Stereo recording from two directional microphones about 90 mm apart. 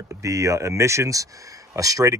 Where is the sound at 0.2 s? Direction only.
35° right (ahead or behind).